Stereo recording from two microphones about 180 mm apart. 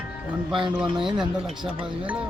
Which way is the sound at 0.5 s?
25° right (ahead or behind).